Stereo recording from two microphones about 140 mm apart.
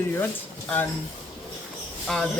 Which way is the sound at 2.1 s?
Centre (ahead or behind).